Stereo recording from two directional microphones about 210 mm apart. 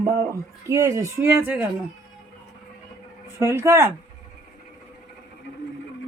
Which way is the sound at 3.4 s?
15° right (ahead or behind).